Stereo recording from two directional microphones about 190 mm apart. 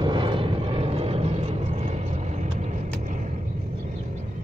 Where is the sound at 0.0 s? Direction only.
25° right (ahead or behind); by 3.3 s 40° right (ahead or behind).